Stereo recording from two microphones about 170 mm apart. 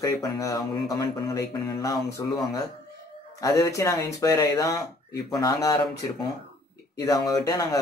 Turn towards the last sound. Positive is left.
turn(degrees=20)  # may be behind; listen again after turning